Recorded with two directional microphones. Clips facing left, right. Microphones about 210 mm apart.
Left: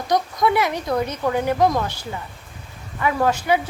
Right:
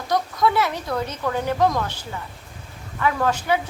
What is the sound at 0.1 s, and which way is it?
Speech, 15° left (ahead or behind).